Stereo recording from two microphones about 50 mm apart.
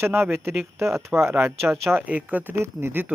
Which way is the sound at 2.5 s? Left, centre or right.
Right.